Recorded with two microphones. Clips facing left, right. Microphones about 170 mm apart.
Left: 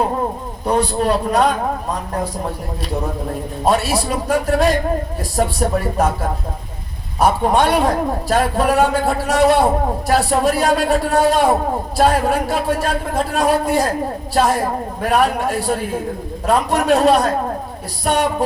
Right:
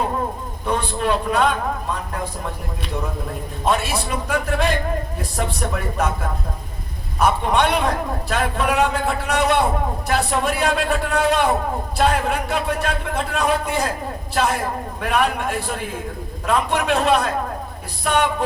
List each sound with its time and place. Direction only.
0.6 s a man's voice: 35° left (ahead or behind)
3.6 s a man's voice: 35° left (ahead or behind)
7.2 s a man's voice: 35° left (ahead or behind)